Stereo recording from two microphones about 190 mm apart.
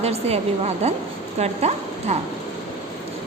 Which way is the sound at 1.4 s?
35° right (ahead or behind).